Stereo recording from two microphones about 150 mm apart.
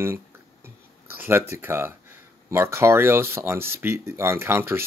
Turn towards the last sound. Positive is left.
turn(degrees=-15)  # may be behind; listen again after turning